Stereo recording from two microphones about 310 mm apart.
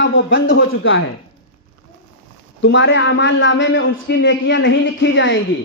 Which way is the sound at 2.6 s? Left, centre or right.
Left.